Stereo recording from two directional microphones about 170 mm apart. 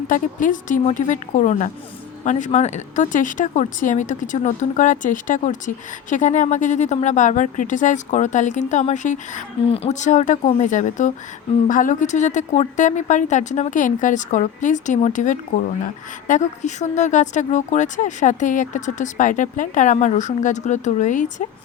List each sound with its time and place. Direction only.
0.1 s a woman's voice: 50° left (ahead or behind)